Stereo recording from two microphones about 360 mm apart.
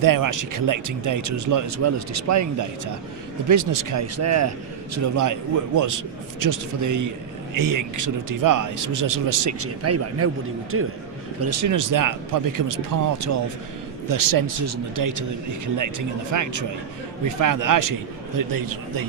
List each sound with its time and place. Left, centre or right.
0.0 s speech: right
9.6 s speech: right
11.4 s speech: right
14.1 s a man's voice: right
14.7 s a man's voice: right